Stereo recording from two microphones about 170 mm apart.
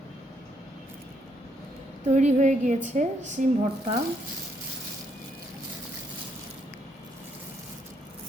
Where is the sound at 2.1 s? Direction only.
45° right (ahead or behind).